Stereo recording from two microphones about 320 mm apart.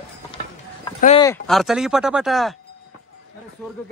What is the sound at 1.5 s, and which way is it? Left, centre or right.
A man's voice, centre.